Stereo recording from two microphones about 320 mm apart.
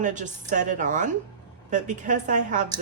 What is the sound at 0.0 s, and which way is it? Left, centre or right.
Speech, right.